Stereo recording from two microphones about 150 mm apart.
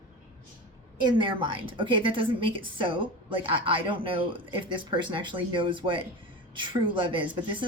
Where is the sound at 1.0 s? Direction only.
35° right (ahead or behind).